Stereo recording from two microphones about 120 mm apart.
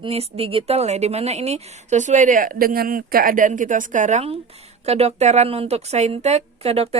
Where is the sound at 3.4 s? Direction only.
90° right.